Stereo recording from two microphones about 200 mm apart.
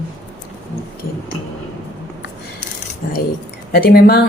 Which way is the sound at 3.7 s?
50° left (ahead or behind).